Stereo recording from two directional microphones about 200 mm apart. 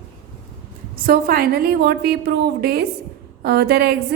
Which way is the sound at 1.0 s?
50° right (ahead or behind).